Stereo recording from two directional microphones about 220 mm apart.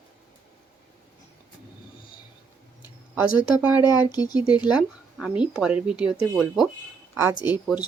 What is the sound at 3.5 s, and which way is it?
Speech, 10° right (ahead or behind).